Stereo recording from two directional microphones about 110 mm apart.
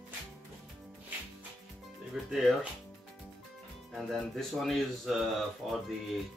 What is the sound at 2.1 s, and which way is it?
Speech, 5° right (ahead or behind).